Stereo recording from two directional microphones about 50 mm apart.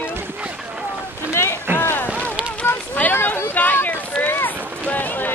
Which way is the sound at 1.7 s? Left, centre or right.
Right.